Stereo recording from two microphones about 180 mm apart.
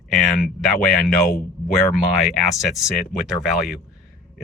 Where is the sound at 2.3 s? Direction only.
Centre (ahead or behind).